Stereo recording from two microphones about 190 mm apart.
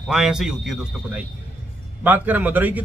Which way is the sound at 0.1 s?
5° right (ahead or behind).